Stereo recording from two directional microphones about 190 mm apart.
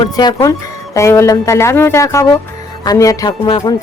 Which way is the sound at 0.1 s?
20° left (ahead or behind).